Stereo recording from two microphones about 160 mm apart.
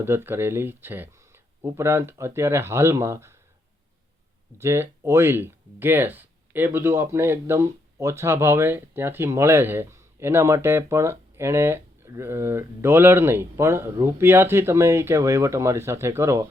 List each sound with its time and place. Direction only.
0.0 s speech: 15° right (ahead or behind)
4.5 s speech: 15° right (ahead or behind)